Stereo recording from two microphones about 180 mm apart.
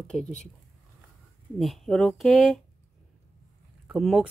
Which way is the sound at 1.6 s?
Centre (ahead or behind).